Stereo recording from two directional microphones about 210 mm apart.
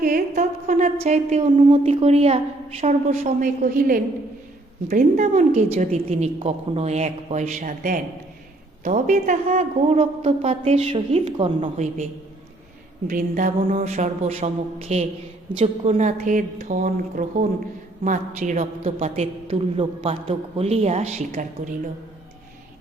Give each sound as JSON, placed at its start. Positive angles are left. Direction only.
{"t": 0.0, "sound": "a woman's voice", "side_deg": -40}
{"t": 13.1, "sound": "a woman's voice", "side_deg": -40}